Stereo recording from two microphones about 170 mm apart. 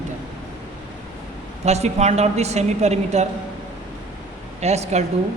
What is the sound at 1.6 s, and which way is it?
A woman's voice, 40° right (ahead or behind).